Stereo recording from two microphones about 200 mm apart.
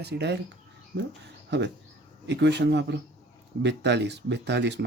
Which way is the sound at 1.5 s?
60° right (ahead or behind).